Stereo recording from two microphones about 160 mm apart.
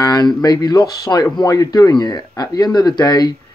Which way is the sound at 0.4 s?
25° left (ahead or behind).